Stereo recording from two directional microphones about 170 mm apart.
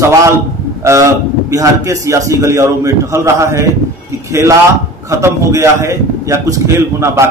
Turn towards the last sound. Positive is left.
turn(degrees=-15)  # may be behind; listen again after turning